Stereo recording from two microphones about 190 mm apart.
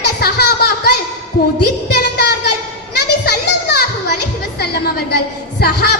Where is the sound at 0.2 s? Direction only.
55° left (ahead or behind).